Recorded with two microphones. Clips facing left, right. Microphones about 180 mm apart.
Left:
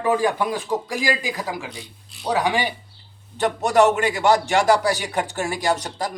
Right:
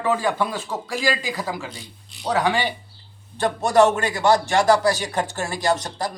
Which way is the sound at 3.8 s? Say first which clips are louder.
Even; 15° left (ahead or behind).